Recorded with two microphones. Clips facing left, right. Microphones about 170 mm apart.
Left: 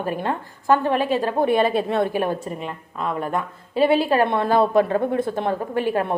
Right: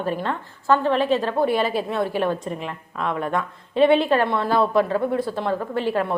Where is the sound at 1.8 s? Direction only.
55° left (ahead or behind).